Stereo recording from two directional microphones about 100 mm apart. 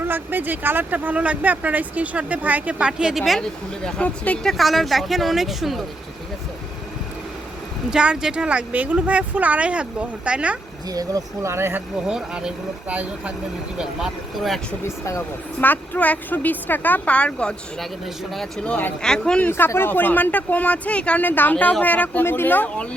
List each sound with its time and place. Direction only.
0.0 s speech: 20° right (ahead or behind); by 3.4 s centre (ahead or behind)
3.8 s speech: 10° left (ahead or behind)
4.5 s speech: centre (ahead or behind)
7.9 s speech: 10° right (ahead or behind)
10.8 s speech: 35° right (ahead or behind)
12.0 s speech: 10° right (ahead or behind)
13.7 s speech: 5° right (ahead or behind)
14.8 s speech: 30° left (ahead or behind)
15.6 s speech: 15° left (ahead or behind)
19.5 s speech: 20° left (ahead or behind)